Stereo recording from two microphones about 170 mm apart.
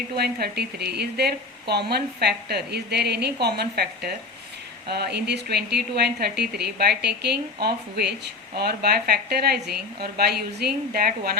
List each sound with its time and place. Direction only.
0.2 s speech: 70° right (ahead or behind)